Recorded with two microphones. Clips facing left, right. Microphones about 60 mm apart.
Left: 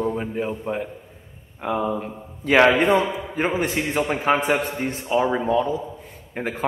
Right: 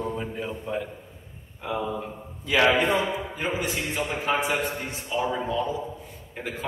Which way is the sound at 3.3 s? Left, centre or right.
Left.